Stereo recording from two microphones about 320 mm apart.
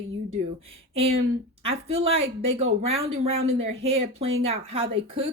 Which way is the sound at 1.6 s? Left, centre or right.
Centre.